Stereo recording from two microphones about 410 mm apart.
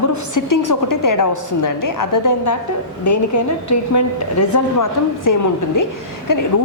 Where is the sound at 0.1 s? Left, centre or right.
Left.